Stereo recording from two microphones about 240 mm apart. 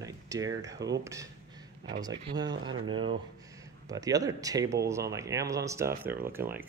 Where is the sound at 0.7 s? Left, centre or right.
Right.